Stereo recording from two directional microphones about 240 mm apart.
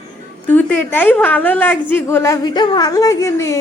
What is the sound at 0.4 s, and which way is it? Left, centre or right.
A woman's voice, centre.